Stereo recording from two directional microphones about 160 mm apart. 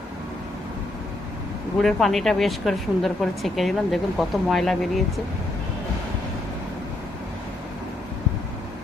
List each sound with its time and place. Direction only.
1.8 s a woman's voice: centre (ahead or behind)